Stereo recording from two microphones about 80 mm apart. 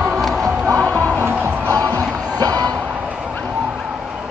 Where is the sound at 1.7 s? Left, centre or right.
Right.